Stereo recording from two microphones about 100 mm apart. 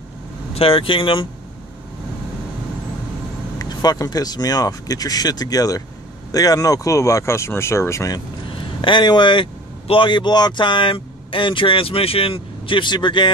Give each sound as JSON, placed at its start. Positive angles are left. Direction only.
{"t": 0.6, "sound": "speech", "side_deg": 65}
{"t": 3.5, "sound": "speech", "side_deg": 40}
{"t": 8.5, "sound": "speech", "side_deg": 55}